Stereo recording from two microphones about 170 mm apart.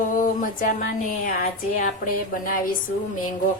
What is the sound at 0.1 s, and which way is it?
A woman's voice, 55° left (ahead or behind).